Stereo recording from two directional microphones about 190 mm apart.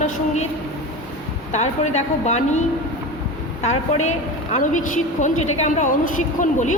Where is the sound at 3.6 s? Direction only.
35° left (ahead or behind).